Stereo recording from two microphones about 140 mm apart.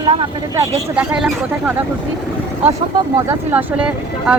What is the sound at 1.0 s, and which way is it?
Speech, 10° right (ahead or behind).